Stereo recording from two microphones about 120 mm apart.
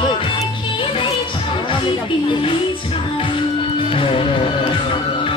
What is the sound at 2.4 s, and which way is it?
Music, 45° left (ahead or behind).